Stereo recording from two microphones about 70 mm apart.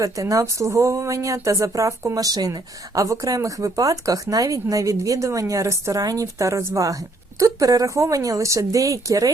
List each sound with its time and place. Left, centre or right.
0.0 s speech: right